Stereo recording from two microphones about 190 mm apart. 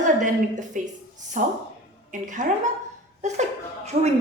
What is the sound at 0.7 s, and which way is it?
Speech, 40° right (ahead or behind).